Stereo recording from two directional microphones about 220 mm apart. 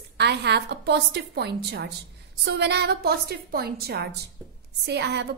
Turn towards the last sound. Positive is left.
turn(degrees=-50)  # may be behind; listen again after turning